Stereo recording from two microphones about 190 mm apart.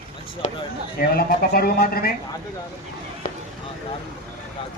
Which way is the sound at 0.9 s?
50° left (ahead or behind).